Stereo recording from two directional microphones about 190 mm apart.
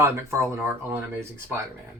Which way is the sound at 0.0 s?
15° right (ahead or behind).